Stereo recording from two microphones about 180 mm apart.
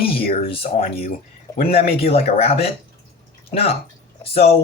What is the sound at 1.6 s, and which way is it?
Speech, 35° left (ahead or behind).